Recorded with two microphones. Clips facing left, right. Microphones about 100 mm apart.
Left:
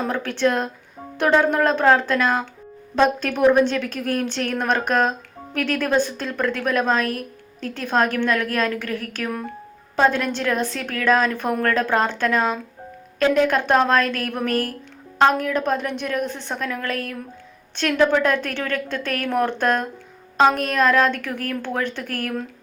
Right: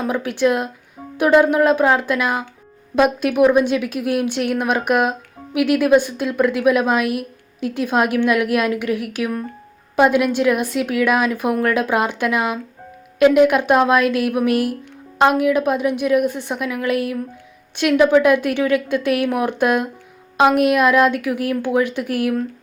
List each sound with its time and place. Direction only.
0.0 s a woman's voice: 10° right (ahead or behind)